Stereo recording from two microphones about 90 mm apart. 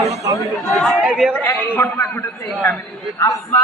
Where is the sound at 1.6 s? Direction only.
20° left (ahead or behind).